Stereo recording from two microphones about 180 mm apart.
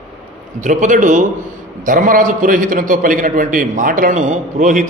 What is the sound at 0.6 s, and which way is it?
A man's voice, 45° right (ahead or behind).